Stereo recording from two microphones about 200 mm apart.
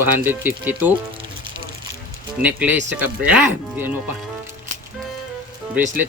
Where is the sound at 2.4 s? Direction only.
10° right (ahead or behind).